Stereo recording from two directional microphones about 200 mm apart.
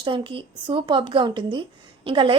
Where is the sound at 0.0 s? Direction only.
25° right (ahead or behind).